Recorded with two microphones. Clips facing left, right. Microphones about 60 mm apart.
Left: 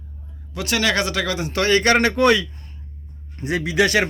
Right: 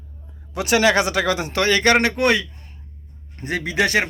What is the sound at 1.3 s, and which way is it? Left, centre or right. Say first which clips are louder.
Speech: left 1 dB; right.